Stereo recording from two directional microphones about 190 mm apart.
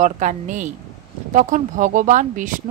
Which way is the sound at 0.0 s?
40° right (ahead or behind).